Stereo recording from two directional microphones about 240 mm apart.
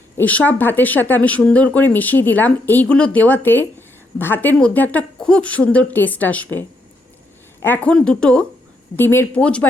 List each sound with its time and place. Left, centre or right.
0.2 s a woman's voice: centre